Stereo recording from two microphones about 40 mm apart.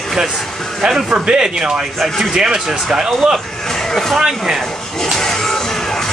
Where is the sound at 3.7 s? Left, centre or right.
Centre.